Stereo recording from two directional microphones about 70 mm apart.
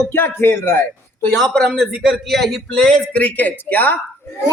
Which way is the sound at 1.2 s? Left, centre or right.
Centre.